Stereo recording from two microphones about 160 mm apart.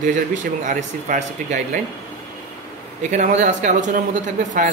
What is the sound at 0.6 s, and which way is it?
Speech, 50° right (ahead or behind).